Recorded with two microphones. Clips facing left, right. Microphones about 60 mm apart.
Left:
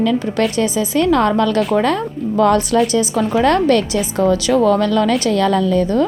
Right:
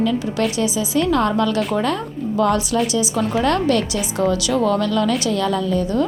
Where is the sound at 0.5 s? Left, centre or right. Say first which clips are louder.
Left 3 dB; left.